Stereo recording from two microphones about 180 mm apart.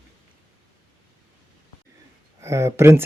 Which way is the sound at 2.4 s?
15° right (ahead or behind).